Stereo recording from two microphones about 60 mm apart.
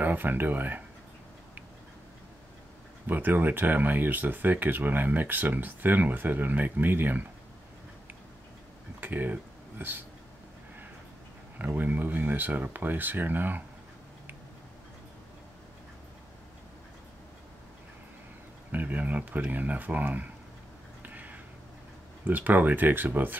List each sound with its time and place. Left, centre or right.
0.0 s speech: right
3.1 s speech: right
9.0 s speech: right
11.5 s speech: right
18.7 s speech: right
21.0 s a sound: right
22.2 s speech: right